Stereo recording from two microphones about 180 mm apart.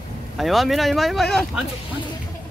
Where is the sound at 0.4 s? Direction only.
Centre (ahead or behind).